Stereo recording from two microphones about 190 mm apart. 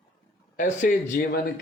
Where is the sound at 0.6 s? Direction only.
40° left (ahead or behind).